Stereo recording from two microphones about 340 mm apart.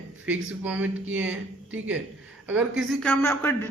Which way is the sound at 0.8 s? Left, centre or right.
Right.